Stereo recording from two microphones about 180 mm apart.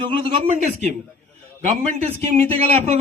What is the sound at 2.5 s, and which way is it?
Speech, 35° right (ahead or behind).